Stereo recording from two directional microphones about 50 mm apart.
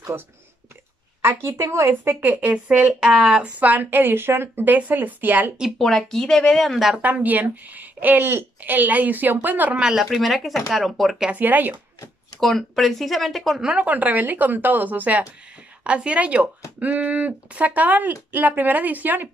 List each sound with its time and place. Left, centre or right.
1.2 s a woman's voice: right
2.2 s speech: right
3.2 s speech: centre
3.5 s speech: right
4.6 s speech: right
5.8 s speech: centre
7.2 s speech: right
8.5 s speech: right
9.8 s speech: centre
10.0 s speech: centre
11.3 s speech: right
12.4 s speech: centre
13.6 s speech: centre
13.8 s speech: right